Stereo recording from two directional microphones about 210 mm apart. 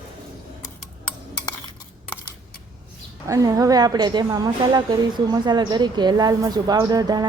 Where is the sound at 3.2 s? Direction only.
15° right (ahead or behind).